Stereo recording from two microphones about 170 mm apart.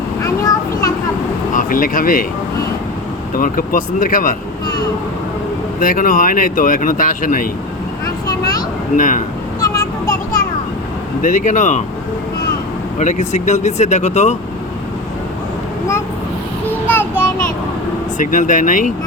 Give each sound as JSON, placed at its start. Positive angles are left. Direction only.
{"t": 1.5, "sound": "speech", "side_deg": 55}
{"t": 3.3, "sound": "speech", "side_deg": 55}
{"t": 5.8, "sound": "speech", "side_deg": 55}
{"t": 8.3, "sound": "a sound", "side_deg": 20}
{"t": 9.0, "sound": "speech", "side_deg": 50}
{"t": 9.6, "sound": "a sound", "side_deg": 20}
{"t": 11.2, "sound": "speech", "side_deg": 50}
{"t": 13.0, "sound": "speech", "side_deg": 45}
{"t": 16.8, "sound": "child singing", "side_deg": 15}
{"t": 18.2, "sound": "speech", "side_deg": 50}